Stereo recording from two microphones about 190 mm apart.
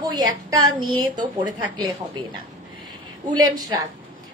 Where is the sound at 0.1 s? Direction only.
25° right (ahead or behind).